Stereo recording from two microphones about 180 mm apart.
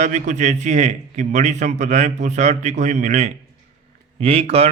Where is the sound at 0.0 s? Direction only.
40° right (ahead or behind).